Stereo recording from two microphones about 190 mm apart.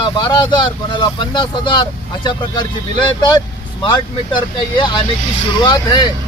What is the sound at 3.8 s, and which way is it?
Speech, 25° left (ahead or behind).